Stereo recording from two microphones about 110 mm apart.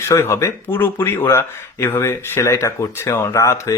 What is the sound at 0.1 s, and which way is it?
Speech, 25° left (ahead or behind).